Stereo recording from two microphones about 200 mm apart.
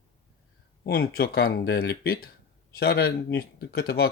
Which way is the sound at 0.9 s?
50° left (ahead or behind).